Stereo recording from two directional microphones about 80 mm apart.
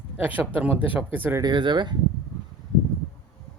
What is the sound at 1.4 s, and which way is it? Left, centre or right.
Speech, right.